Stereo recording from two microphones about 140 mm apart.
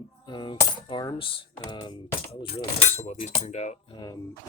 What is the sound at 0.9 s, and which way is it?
Speech, 35° left (ahead or behind).